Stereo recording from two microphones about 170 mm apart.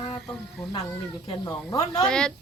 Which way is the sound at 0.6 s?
Centre (ahead or behind).